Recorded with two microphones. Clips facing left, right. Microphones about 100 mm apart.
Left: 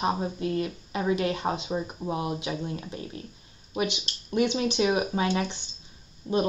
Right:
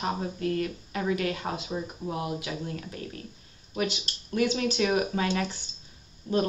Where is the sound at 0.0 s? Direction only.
20° left (ahead or behind).